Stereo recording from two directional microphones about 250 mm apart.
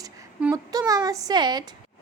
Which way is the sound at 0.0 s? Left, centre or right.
Centre.